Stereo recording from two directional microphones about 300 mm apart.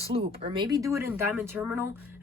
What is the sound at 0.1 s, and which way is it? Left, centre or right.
Speech, centre.